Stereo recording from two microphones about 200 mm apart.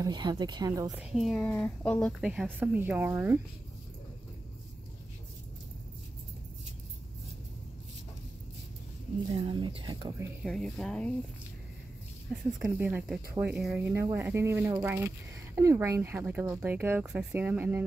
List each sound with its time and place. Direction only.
0.0 s speech: 20° right (ahead or behind)
0.9 s a woman's voice: 5° right (ahead or behind)
2.2 s speech: 5° right (ahead or behind)
9.3 s speech: 25° right (ahead or behind)
10.4 s a woman's voice: centre (ahead or behind)
12.4 s speech: 5° right (ahead or behind)